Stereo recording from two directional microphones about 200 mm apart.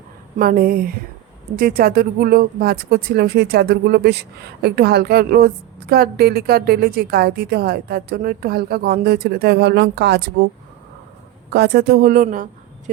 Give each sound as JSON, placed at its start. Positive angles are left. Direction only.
{"t": 0.3, "sound": "speech", "side_deg": -45}
{"t": 11.5, "sound": "speech", "side_deg": -55}